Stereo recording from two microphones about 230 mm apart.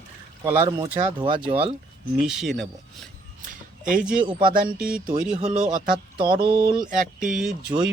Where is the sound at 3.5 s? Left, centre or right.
Right.